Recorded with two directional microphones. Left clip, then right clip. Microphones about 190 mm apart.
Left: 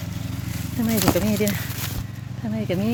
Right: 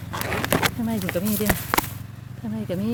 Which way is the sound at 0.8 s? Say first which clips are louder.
Left 3 dB; 20° right (ahead or behind).